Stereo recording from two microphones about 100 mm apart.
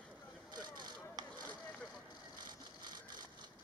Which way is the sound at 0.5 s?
45° right (ahead or behind).